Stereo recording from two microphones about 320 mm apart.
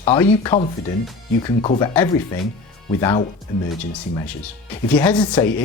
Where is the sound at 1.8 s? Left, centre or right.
Centre.